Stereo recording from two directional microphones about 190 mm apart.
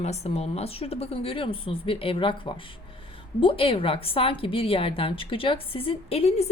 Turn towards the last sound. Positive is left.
turn(degrees=35)  # may be behind; listen again after turning